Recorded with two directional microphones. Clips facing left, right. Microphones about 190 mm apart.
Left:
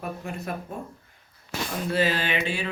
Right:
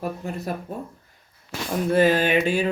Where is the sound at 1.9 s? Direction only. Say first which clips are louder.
Right 7 dB; 50° right (ahead or behind).